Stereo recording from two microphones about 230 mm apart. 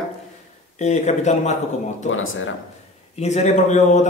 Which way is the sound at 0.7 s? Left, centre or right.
Left.